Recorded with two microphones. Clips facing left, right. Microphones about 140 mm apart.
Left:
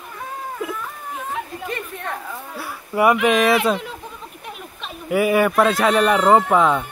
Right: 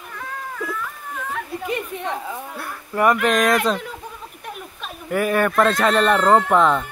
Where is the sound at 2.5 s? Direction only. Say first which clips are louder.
Left 1 dB; 5° left (ahead or behind).